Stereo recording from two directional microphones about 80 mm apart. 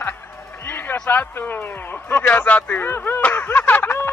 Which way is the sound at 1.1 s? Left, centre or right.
Left.